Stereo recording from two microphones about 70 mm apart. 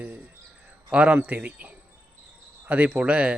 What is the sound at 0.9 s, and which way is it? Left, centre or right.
Speech, centre.